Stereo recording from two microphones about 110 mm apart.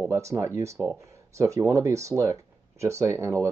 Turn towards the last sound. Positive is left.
turn(degrees=-25)  # may be behind; listen again after turning